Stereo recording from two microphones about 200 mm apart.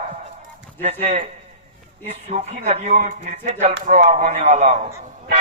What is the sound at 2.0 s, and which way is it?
Speech, 35° right (ahead or behind).